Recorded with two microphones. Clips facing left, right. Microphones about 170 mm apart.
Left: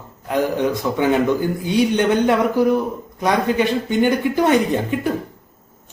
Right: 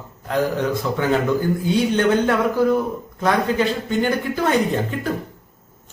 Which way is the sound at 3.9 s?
15° left (ahead or behind).